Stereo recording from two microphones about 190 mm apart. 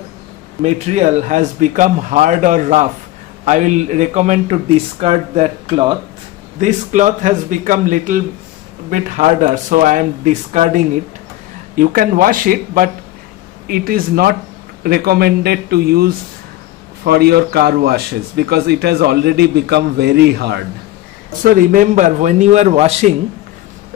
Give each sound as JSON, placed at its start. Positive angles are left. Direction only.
{"t": 0.6, "sound": "speech", "side_deg": -35}
{"t": 6.6, "sound": "a man's voice", "side_deg": -40}
{"t": 21.4, "sound": "speech", "side_deg": -45}